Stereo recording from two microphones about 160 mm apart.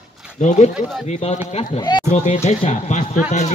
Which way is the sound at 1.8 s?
25° left (ahead or behind).